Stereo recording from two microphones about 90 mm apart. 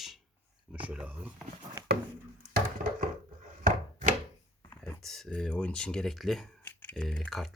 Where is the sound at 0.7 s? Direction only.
15° right (ahead or behind).